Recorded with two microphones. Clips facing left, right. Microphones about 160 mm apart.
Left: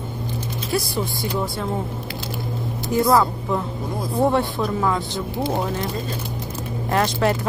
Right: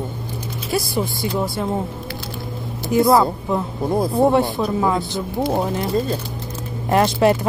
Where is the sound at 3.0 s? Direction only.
10° right (ahead or behind).